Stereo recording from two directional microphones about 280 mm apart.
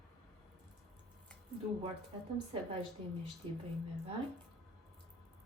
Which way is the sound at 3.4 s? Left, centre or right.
Right.